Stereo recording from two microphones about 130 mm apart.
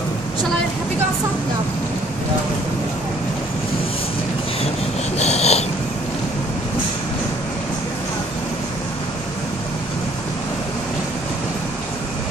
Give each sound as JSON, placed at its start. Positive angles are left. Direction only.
{"t": 5.2, "sound": "wheeze", "side_deg": 55}